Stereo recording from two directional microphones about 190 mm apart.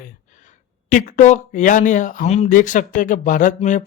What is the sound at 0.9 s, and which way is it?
Speech, 40° left (ahead or behind).